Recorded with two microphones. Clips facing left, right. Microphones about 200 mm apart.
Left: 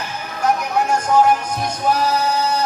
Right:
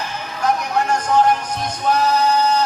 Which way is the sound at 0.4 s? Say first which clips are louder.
Left 1 dB; 10° left (ahead or behind).